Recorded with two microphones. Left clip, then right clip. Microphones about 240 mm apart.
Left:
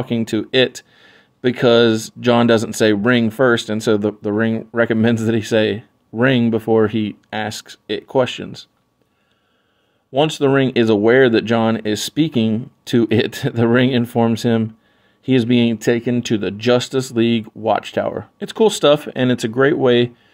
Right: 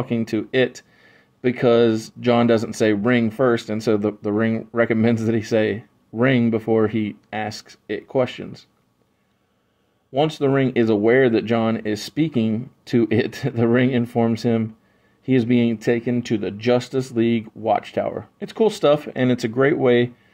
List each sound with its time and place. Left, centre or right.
0.0 s speech: centre
10.1 s speech: left